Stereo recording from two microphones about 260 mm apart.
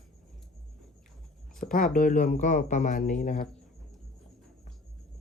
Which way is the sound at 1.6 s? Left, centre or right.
Left.